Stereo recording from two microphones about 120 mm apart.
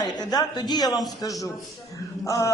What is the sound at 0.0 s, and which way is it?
A man's voice, 35° left (ahead or behind).